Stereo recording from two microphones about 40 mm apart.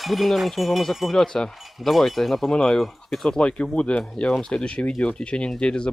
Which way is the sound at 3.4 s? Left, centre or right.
Left.